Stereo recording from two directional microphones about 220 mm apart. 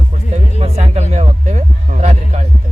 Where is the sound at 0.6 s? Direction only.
25° right (ahead or behind).